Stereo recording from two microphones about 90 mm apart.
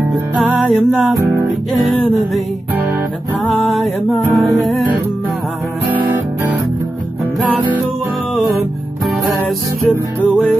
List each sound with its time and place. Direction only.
0.4 s music: centre (ahead or behind)
3.4 s music: centre (ahead or behind)
5.9 s guitar: 20° right (ahead or behind)
9.8 s music: centre (ahead or behind)